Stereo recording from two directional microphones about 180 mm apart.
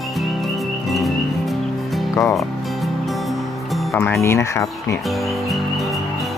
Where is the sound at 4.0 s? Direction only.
10° left (ahead or behind).